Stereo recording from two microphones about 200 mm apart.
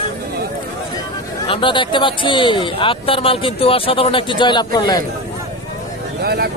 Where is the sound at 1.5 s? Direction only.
25° left (ahead or behind).